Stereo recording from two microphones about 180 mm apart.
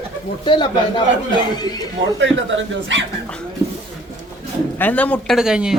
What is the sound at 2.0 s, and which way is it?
Speech, 90° right.